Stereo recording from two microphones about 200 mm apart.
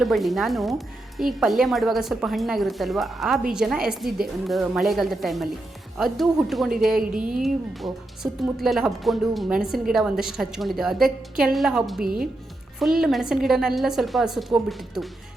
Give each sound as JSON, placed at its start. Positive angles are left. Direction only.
{"t": 0.0, "sound": "speech", "side_deg": 0}